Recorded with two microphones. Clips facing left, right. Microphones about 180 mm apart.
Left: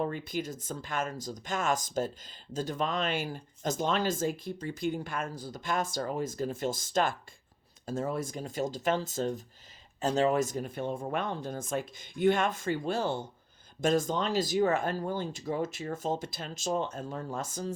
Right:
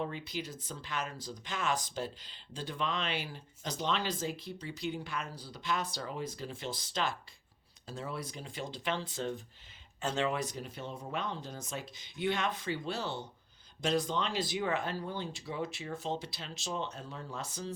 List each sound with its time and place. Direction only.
0.0 s speech: 50° left (ahead or behind)